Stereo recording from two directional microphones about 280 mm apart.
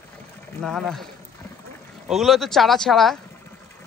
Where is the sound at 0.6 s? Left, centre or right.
Centre.